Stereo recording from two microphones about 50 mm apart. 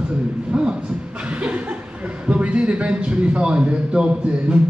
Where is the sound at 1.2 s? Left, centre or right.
Right.